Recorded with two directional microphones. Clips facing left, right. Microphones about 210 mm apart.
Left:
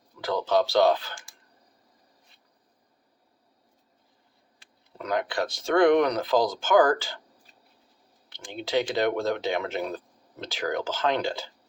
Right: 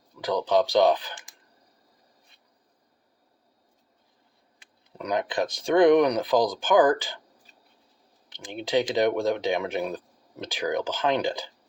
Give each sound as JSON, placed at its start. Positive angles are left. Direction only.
{"t": 0.2, "sound": "speech", "side_deg": -15}
{"t": 4.9, "sound": "speech", "side_deg": -15}
{"t": 8.4, "sound": "speech", "side_deg": -15}